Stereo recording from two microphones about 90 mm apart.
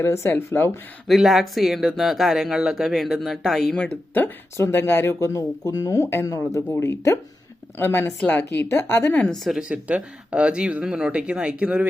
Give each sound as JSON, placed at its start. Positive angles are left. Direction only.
{"t": 0.0, "sound": "speech", "side_deg": 25}
{"t": 1.0, "sound": "speech", "side_deg": 0}
{"t": 3.8, "sound": "speech", "side_deg": 20}
{"t": 5.2, "sound": "speech", "side_deg": 35}
{"t": 9.2, "sound": "speech", "side_deg": 0}